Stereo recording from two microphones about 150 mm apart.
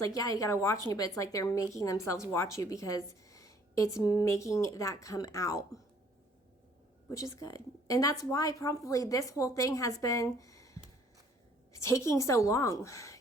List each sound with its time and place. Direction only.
0.0 s speech: 25° left (ahead or behind)
7.1 s speech: 20° left (ahead or behind)
11.7 s speech: 20° left (ahead or behind)